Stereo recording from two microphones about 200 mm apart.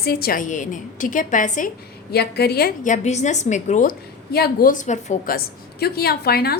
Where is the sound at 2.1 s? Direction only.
55° left (ahead or behind).